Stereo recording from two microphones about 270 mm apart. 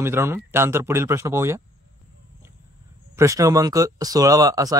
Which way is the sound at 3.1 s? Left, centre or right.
Centre.